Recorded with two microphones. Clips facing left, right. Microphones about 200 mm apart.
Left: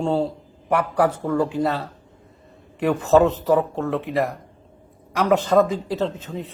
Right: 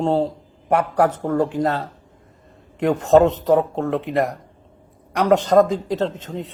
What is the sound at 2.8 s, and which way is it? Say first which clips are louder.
Speech: right 2 dB; 10° left (ahead or behind).